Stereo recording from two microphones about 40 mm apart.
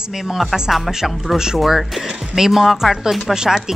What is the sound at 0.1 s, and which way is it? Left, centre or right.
Speech, centre.